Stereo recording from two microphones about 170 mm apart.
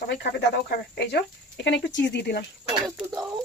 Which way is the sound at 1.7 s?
90° left.